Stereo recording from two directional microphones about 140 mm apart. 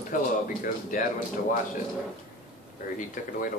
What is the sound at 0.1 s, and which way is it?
Speech, 70° left (ahead or behind).